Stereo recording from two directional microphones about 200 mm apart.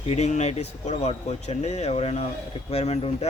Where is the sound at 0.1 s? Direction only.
35° left (ahead or behind).